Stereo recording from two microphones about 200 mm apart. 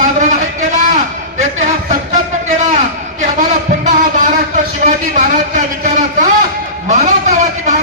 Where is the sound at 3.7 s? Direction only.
40° right (ahead or behind).